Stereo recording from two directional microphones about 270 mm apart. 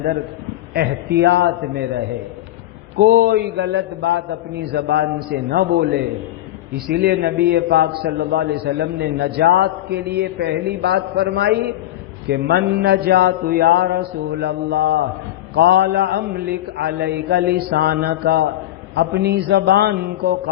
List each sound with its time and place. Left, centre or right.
0.7 s a man's voice: right
3.0 s a man's voice: right
6.7 s a man's voice: right